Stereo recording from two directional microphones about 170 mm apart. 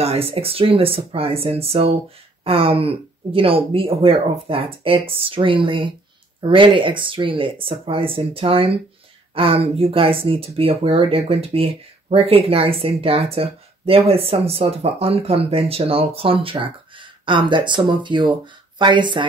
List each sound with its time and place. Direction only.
0.0 s speech: 35° right (ahead or behind)